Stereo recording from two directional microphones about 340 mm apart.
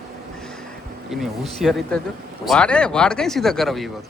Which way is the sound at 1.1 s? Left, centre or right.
Centre.